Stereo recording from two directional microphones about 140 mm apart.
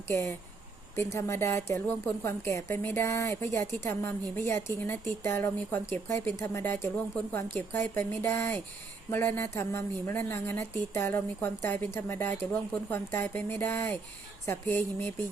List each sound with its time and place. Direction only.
0.1 s a woman's voice: 15° left (ahead or behind)